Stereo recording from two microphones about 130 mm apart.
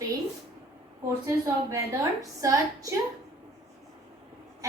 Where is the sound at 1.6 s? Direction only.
25° right (ahead or behind).